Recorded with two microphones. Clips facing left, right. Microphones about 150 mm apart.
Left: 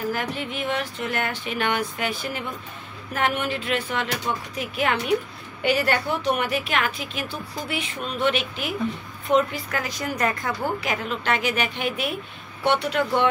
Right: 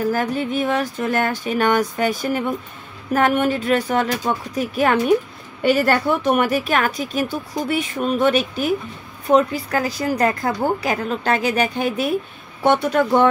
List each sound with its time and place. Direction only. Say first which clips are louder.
0.1 s a woman's voice: right 7 dB; 40° right (ahead or behind)